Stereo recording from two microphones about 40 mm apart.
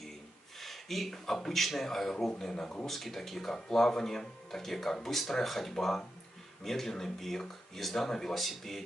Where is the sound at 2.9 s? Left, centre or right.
Centre.